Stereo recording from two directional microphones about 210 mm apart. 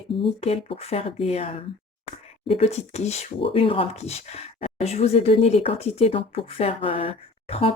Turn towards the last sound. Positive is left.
turn(degrees=25)  # may be behind; listen again after turning